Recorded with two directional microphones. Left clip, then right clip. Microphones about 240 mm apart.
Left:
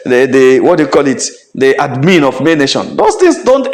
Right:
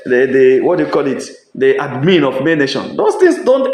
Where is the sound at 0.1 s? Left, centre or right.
Left.